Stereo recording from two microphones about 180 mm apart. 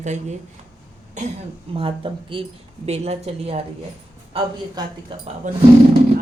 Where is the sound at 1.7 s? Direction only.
30° right (ahead or behind).